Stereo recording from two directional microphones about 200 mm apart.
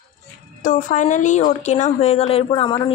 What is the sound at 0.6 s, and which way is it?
Speech, 40° left (ahead or behind).